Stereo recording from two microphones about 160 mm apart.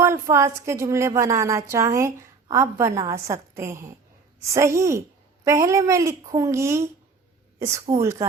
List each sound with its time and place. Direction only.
0.0 s a woman's voice: 15° right (ahead or behind)